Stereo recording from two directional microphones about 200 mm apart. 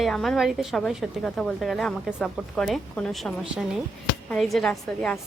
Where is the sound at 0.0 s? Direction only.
Centre (ahead or behind).